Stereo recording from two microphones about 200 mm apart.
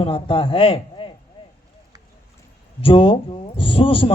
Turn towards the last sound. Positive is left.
turn(degrees=25)  # may be behind; listen again after turning